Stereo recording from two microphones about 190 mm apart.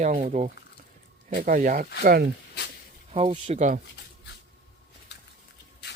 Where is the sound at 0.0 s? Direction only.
40° right (ahead or behind).